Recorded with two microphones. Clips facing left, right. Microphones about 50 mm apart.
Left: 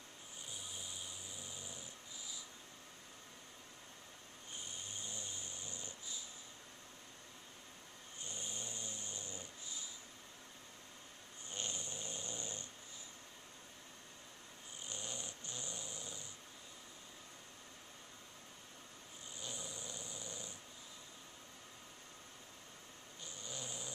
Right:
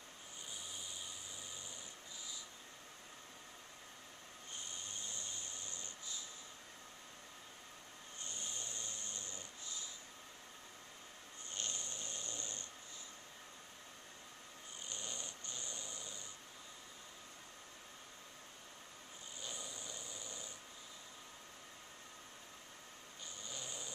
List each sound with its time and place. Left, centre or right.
4.8 s tools: centre
8.3 s snoring: centre
11.5 s snoring: centre
14.9 s snoring: centre
19.4 s a sound: centre
23.5 s a sound: centre